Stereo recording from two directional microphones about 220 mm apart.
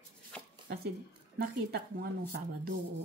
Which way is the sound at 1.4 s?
40° right (ahead or behind).